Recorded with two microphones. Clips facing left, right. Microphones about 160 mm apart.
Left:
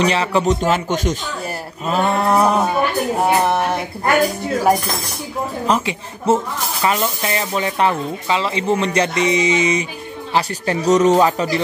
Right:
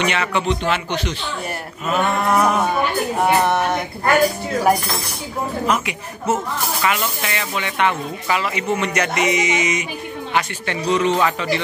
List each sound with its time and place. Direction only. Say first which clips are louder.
0.0 s speech: left 4 dB; 35° left (ahead or behind)
1.9 s speech: left 2 dB; 30° left (ahead or behind)
2.6 s speech: left 2 dB; 5° left (ahead or behind)
5.7 s speech: left 2 dB; 30° left (ahead or behind)